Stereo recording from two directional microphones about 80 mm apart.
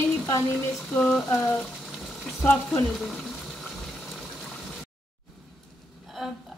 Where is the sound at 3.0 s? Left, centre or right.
Centre.